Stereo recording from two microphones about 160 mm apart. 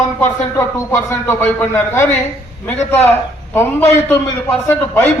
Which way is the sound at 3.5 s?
15° left (ahead or behind).